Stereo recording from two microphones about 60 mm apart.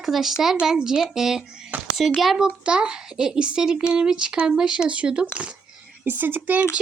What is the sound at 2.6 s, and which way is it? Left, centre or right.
Speech, centre.